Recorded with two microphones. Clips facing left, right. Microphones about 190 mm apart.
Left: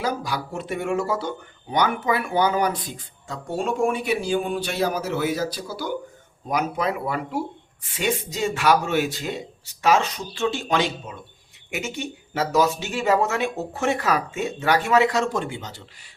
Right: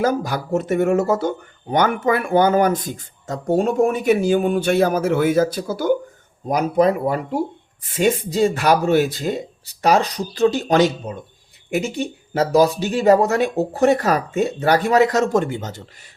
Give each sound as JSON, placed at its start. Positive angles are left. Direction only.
{"t": 0.0, "sound": "speech", "side_deg": -50}